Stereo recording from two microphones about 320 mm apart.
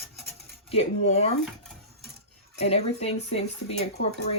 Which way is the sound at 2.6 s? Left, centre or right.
Centre.